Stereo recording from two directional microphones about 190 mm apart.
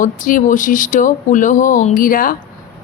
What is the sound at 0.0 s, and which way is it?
A woman's voice, 45° left (ahead or behind).